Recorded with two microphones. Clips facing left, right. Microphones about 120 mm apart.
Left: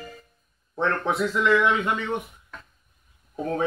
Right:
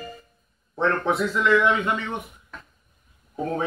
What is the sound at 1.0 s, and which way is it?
Speech, 10° left (ahead or behind).